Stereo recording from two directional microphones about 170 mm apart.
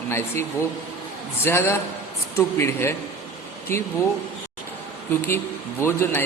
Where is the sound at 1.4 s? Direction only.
15° left (ahead or behind).